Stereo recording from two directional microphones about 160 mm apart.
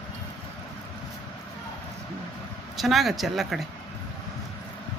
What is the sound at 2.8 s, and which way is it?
Speech, centre (ahead or behind).